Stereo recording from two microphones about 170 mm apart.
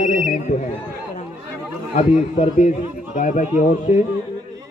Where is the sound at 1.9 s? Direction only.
50° left (ahead or behind).